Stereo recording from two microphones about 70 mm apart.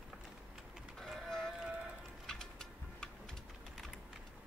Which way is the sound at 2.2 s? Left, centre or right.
Centre.